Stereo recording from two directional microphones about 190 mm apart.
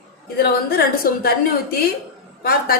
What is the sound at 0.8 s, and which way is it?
Speech, 55° left (ahead or behind).